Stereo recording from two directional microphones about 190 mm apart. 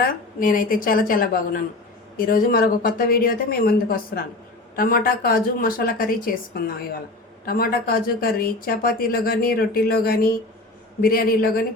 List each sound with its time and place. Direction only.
0.0 s speech: 45° left (ahead or behind)